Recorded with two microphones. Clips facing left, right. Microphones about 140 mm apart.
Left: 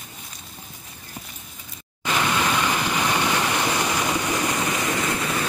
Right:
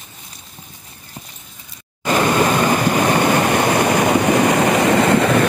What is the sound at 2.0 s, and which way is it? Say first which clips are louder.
Waves: right 8 dB; 45° right (ahead or behind).